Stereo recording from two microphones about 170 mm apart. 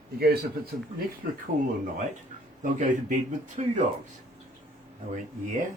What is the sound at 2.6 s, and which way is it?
Speech, 45° right (ahead or behind).